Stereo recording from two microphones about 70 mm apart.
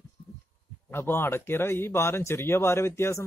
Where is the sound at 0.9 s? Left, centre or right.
Left.